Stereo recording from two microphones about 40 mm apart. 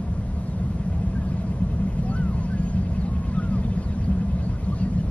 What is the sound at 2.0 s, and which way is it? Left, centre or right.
Vehicle, left.